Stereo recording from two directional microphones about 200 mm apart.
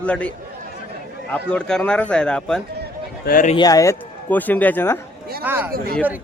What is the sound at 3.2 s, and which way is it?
Speech, 45° left (ahead or behind).